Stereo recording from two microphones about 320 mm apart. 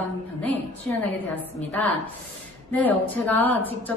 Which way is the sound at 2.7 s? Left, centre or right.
Centre.